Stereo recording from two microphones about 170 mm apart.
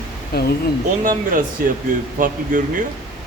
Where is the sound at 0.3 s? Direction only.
65° left (ahead or behind).